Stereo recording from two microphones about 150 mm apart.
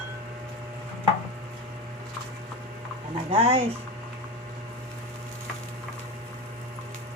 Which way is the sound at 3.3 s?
40° right (ahead or behind).